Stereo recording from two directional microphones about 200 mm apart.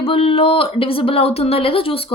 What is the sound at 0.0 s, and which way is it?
A woman's voice, 30° left (ahead or behind).